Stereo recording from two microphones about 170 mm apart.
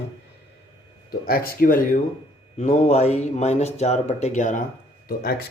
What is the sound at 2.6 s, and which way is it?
Speech, 45° left (ahead or behind).